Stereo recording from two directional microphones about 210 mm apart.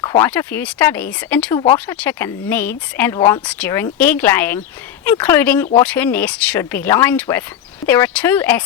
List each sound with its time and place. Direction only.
0.0 s a sound: 15° left (ahead or behind)
0.3 s speech: 10° left (ahead or behind)
3.2 s speech: 20° left (ahead or behind)
3.4 s speech: 5° left (ahead or behind)